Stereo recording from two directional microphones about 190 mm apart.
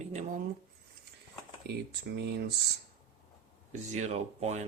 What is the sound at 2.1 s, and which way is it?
Speech, 60° right (ahead or behind).